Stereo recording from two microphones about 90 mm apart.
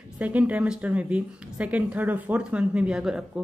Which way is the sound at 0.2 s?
15° right (ahead or behind).